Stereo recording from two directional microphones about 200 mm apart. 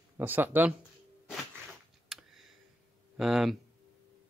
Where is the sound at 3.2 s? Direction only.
Centre (ahead or behind).